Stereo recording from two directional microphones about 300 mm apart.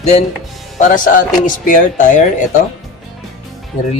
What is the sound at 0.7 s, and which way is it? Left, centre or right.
Speech, left.